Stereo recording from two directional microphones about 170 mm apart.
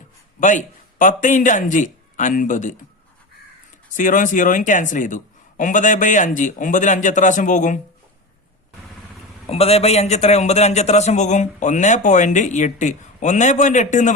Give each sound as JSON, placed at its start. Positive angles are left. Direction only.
{"t": 0.3, "sound": "a man's voice", "side_deg": 50}
{"t": 3.9, "sound": "a man's voice", "side_deg": 50}
{"t": 9.5, "sound": "a man's voice", "side_deg": 35}